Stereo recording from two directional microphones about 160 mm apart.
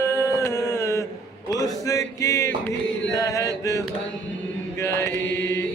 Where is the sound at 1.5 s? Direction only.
20° left (ahead or behind).